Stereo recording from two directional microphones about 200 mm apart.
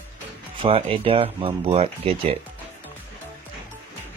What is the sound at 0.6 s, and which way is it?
Speech, 25° right (ahead or behind).